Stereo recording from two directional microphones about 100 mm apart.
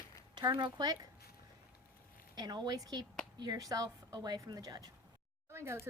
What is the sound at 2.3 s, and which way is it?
Speech, 45° right (ahead or behind).